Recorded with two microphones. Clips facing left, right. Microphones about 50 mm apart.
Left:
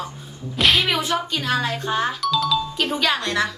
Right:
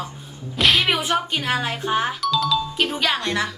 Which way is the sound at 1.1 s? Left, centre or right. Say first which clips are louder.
Even; right.